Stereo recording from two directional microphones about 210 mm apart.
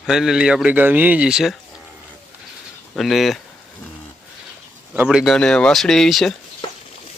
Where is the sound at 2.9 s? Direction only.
Centre (ahead or behind).